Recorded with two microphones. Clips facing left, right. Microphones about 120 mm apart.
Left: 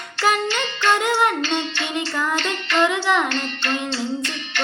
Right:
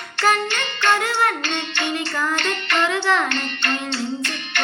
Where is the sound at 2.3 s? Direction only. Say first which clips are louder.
Even; 60° right (ahead or behind).